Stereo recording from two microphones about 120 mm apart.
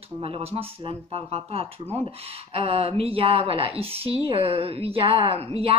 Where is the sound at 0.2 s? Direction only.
55° right (ahead or behind).